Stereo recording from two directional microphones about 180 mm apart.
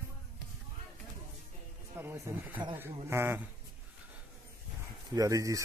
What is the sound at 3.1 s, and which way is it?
Speech, 15° right (ahead or behind).